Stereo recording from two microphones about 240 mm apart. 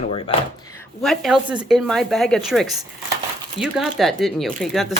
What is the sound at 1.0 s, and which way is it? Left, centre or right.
Speech, centre.